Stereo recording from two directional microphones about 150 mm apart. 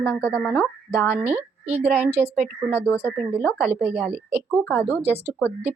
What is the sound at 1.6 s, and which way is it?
Speech, 45° right (ahead or behind).